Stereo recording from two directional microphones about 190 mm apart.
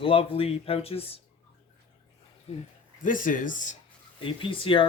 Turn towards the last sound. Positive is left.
turn(degrees=25)  # may be behind; listen again after turning